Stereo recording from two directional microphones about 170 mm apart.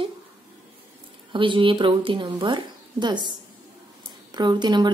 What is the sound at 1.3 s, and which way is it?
Speech, 30° right (ahead or behind).